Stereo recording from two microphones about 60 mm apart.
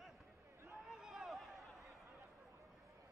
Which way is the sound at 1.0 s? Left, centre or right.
Centre.